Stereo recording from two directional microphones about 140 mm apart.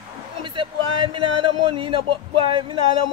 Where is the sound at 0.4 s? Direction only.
35° right (ahead or behind).